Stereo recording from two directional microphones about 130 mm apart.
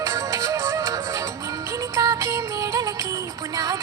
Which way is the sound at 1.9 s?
25° right (ahead or behind).